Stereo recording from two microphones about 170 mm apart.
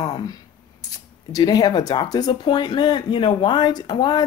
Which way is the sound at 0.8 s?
20° left (ahead or behind).